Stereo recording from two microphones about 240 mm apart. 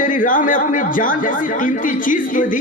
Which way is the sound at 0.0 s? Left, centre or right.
Left.